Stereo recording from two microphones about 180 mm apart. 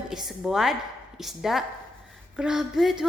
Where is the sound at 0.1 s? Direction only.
Centre (ahead or behind).